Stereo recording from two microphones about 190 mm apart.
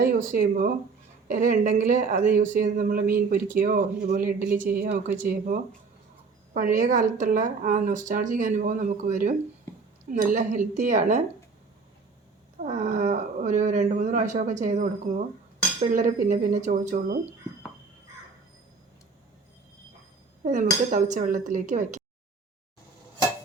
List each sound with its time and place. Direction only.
0.0 s speech: 45° right (ahead or behind)
12.5 s speech: 40° right (ahead or behind)
20.4 s dishes: 40° right (ahead or behind)
20.9 s speech: 40° right (ahead or behind)